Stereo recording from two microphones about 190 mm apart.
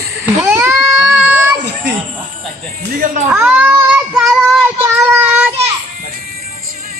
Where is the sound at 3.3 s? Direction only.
5° right (ahead or behind).